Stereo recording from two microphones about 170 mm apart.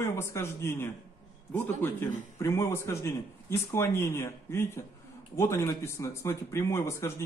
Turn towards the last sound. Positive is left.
turn(degrees=15)  # may be behind; listen again after turning